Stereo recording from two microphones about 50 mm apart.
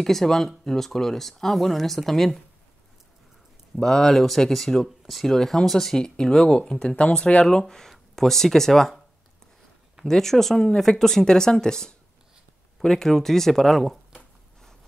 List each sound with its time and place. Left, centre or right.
0.0 s speech: centre
3.7 s speech: centre
7.4 s speech: centre
10.0 s speech: centre